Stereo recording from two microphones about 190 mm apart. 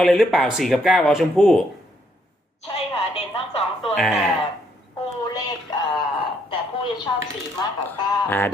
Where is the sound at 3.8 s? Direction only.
Centre (ahead or behind).